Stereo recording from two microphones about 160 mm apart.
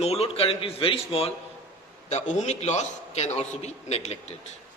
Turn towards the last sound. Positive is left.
turn(degrees=40)  # may be behind; listen again after turning